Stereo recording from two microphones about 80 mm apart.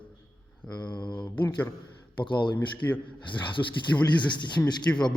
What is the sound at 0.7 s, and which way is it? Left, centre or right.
Speech, left.